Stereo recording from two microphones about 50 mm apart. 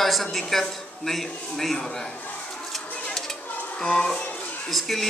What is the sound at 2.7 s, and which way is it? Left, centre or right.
Bird, centre.